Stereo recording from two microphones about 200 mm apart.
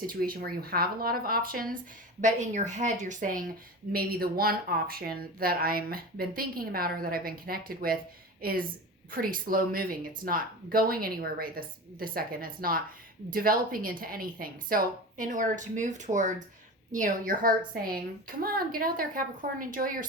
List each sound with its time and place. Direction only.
0.0 s a woman's voice: 45° right (ahead or behind)